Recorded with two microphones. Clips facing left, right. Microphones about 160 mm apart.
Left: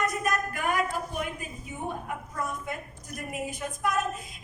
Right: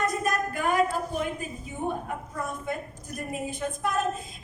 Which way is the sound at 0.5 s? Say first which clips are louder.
Right 4 dB; 30° right (ahead or behind).